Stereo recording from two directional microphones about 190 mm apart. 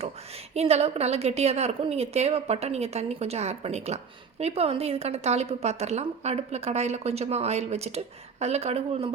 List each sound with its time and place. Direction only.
0.5 s a woman's voice: 35° right (ahead or behind)